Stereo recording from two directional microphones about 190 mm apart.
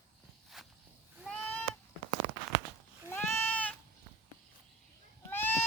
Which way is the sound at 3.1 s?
10° left (ahead or behind).